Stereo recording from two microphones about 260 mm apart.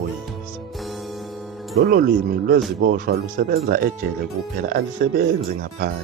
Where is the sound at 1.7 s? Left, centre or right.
Right.